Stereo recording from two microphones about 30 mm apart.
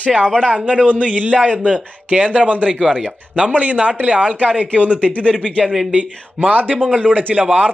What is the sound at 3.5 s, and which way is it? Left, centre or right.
Speech, right.